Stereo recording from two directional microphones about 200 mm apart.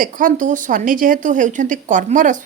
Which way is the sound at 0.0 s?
40° right (ahead or behind).